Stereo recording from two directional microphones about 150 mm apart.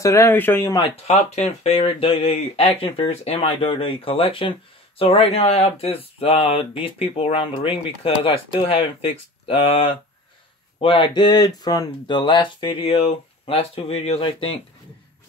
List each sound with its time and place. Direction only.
0.0 s speech: 20° left (ahead or behind)
1.0 s speech: 45° left (ahead or behind)